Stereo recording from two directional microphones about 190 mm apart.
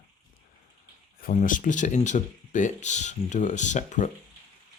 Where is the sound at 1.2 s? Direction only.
45° left (ahead or behind).